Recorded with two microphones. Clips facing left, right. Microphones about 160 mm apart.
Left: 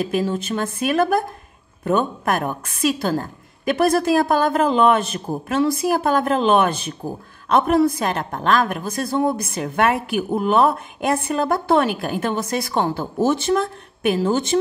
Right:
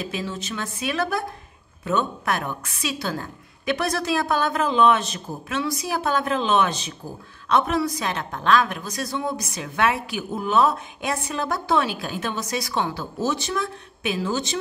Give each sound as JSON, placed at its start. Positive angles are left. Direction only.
{"t": 0.0, "sound": "a woman's voice", "side_deg": 50}